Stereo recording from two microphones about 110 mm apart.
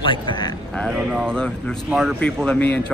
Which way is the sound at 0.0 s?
45° left (ahead or behind).